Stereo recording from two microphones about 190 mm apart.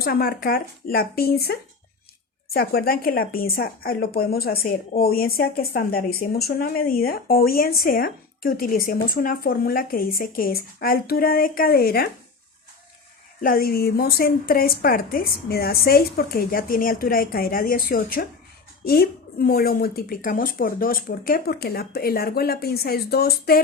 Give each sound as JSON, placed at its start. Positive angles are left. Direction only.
{"t": 0.0, "sound": "speech", "side_deg": 50}
{"t": 13.4, "sound": "speech", "side_deg": 50}